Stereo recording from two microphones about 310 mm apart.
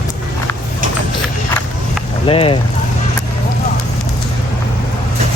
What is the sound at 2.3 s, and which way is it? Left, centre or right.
Speech, centre.